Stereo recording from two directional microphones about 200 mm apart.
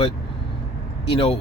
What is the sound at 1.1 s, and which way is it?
Speech, 30° left (ahead or behind).